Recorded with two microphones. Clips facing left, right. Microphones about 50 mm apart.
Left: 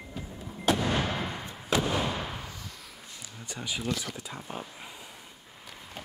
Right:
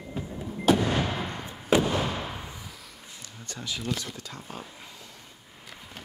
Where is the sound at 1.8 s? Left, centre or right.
Centre.